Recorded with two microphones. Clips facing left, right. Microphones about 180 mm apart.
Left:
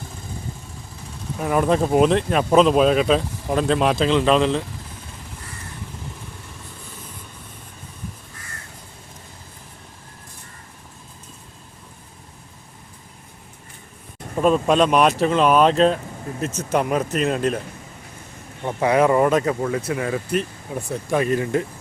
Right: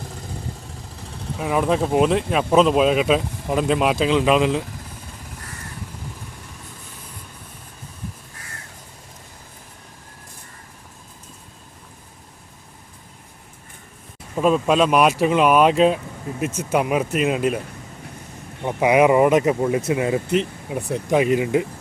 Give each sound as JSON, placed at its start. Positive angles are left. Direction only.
{"t": 1.4, "sound": "speech", "side_deg": 0}
{"t": 14.3, "sound": "speech", "side_deg": -5}
{"t": 18.6, "sound": "speech", "side_deg": -15}